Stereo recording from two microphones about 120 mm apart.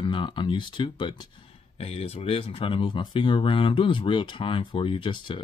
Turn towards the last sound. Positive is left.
turn(degrees=45)  # may be behind; listen again after turning